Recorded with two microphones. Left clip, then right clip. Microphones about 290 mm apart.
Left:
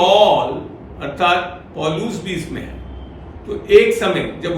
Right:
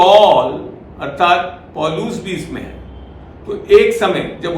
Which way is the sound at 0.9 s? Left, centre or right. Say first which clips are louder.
Right 3 dB; centre.